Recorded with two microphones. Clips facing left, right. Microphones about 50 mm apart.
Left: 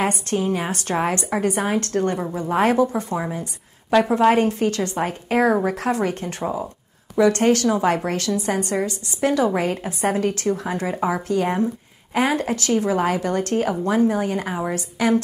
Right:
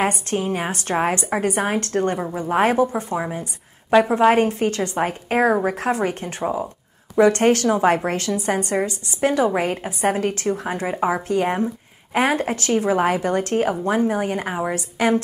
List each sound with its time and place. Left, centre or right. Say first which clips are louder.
0.0 s a woman's voice: even; centre
1.4 s a woman's voice: left 2 dB; right; by 6.7 s centre
7.2 s a woman's voice: right 1 dB; right